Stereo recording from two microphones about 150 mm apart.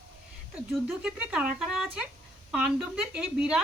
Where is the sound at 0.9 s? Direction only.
5° right (ahead or behind).